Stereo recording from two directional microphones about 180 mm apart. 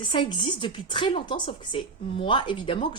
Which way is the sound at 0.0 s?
25° left (ahead or behind).